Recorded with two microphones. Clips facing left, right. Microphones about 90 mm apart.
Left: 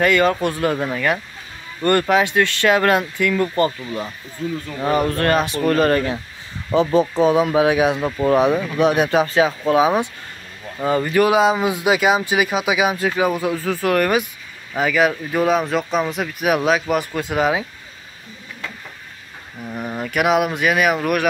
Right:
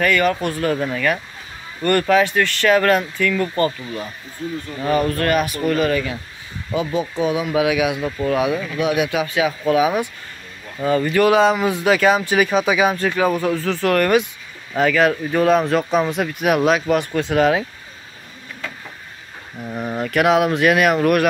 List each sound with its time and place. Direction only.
0.0 s speech: 25° left (ahead or behind)
5.1 s speech: 35° left (ahead or behind)
5.7 s speech: 45° left (ahead or behind); by 17.6 s 10° left (ahead or behind)
19.6 s speech: 5° right (ahead or behind)